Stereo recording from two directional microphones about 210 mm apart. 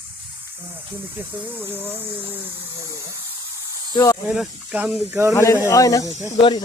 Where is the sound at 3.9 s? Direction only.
15° left (ahead or behind).